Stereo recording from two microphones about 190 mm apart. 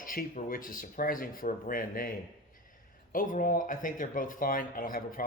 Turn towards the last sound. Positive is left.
turn(degrees=45)  # may be behind; listen again after turning